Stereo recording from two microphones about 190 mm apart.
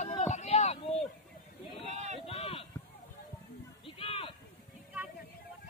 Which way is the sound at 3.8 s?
30° left (ahead or behind).